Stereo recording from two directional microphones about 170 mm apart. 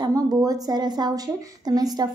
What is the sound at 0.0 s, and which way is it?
A woman's voice, 20° right (ahead or behind).